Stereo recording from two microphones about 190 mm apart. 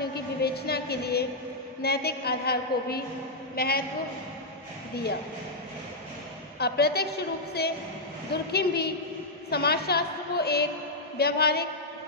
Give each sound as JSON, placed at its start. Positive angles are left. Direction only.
{"t": 0.0, "sound": "a woman's voice", "side_deg": 55}
{"t": 6.6, "sound": "a woman's voice", "side_deg": 55}